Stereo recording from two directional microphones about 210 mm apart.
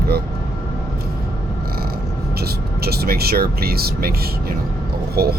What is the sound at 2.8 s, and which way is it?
Speech, 50° right (ahead or behind).